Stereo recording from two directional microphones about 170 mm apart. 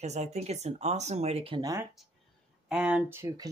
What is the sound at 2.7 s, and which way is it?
Speech, 5° right (ahead or behind).